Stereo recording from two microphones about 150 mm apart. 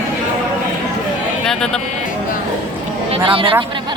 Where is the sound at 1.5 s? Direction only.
5° left (ahead or behind).